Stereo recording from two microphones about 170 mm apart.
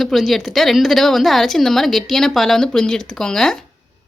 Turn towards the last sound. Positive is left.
turn(degrees=5)  # may be behind; listen again after turning